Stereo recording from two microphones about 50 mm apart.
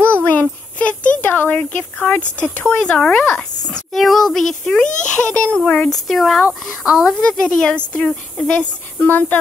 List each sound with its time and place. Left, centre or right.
0.0 s a sound: left
2.5 s speech: left
3.3 s a sound: centre
3.9 s speech: centre
5.0 s speech: left
5.9 s speech: centre
6.8 s speech: centre
7.2 s speech: centre
9.0 s speech: left